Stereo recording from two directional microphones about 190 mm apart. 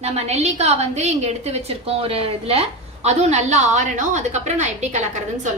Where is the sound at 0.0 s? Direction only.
35° right (ahead or behind).